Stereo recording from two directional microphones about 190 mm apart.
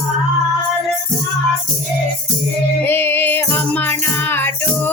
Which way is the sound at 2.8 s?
10° left (ahead or behind).